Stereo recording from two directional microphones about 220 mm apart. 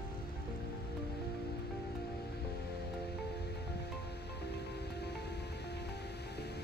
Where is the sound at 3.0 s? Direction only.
50° left (ahead or behind).